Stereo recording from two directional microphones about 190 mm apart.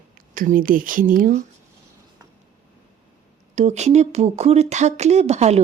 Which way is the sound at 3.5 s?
35° right (ahead or behind).